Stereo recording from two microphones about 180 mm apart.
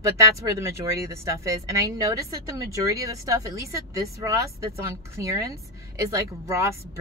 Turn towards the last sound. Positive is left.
turn(degrees=-15)  # may be behind; listen again after turning